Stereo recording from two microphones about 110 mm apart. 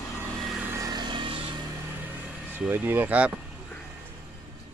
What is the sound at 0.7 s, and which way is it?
Vehicle, 30° right (ahead or behind).